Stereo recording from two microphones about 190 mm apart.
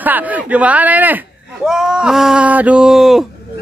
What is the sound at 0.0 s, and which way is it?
Speech, 10° right (ahead or behind).